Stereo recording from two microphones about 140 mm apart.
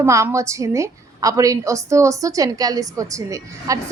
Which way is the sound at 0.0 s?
20° right (ahead or behind).